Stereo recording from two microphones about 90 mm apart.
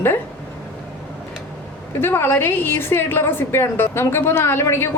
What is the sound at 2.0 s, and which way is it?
Speech, 25° left (ahead or behind).